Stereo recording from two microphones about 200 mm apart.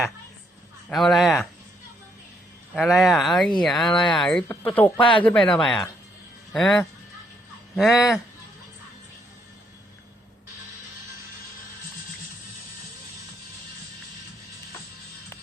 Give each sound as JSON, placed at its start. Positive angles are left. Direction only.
{"t": 0.9, "sound": "speech", "side_deg": 0}
{"t": 2.7, "sound": "speech", "side_deg": 0}
{"t": 4.9, "sound": "speech", "side_deg": 25}
{"t": 5.2, "sound": "speech", "side_deg": 5}